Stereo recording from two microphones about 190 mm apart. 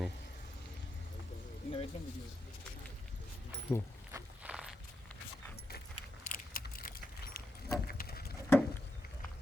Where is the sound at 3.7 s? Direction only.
10° left (ahead or behind).